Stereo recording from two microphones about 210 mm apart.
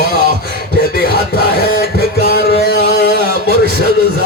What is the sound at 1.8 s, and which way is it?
Music, 50° right (ahead or behind).